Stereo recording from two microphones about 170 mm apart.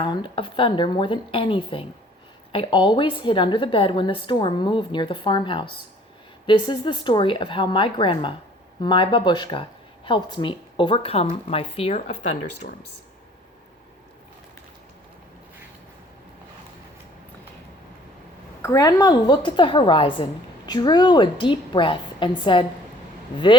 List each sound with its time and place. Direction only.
0.0 s speech: 30° left (ahead or behind)
18.6 s speech: 20° left (ahead or behind)